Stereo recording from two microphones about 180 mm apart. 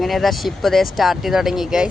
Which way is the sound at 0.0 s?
Centre (ahead or behind).